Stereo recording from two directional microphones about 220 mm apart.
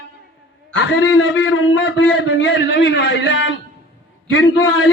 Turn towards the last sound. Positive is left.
turn(degrees=65)  # may be behind; listen again after turning